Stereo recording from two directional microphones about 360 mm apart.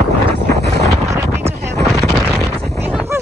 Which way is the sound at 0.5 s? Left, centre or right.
Right.